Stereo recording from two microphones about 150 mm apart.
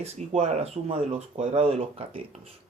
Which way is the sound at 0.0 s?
45° right (ahead or behind).